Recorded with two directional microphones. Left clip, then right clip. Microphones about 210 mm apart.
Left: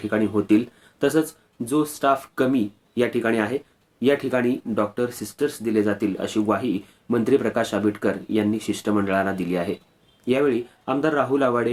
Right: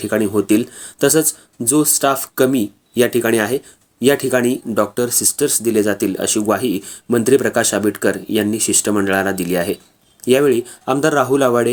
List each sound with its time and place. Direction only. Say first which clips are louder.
0.0 s speech: right 6 dB; 45° right (ahead or behind)